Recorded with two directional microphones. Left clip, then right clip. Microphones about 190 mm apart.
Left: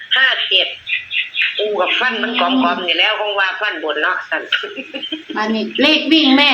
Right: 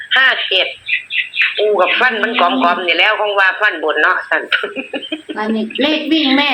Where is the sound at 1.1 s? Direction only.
25° right (ahead or behind).